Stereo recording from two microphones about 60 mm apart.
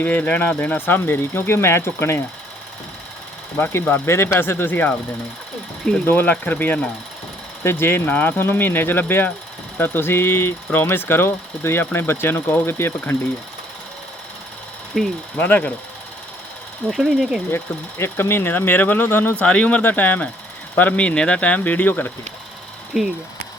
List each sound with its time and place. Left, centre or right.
0.0 s speech: left
3.7 s speech: left
6.1 s speech: left
14.9 s speech: centre
15.4 s speech: left
16.9 s speech: centre
17.5 s speech: left
19.4 s speech: left
19.8 s speech: left
22.9 s speech: centre